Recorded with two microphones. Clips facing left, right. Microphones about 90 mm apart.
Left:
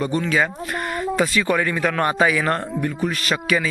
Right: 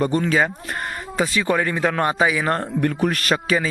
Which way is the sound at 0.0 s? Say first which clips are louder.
Right 2 dB; 40° right (ahead or behind).